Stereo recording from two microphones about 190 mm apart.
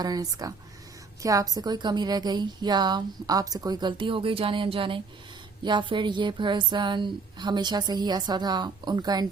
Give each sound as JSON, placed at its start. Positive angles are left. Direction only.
{"t": 0.0, "sound": "a woman's voice", "side_deg": -20}